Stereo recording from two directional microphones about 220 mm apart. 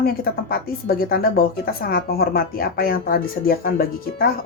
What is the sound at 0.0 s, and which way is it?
A woman's voice, 45° left (ahead or behind).